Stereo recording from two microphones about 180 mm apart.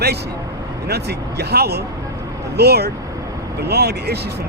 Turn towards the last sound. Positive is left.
turn(degrees=-65)  # may be behind; listen again after turning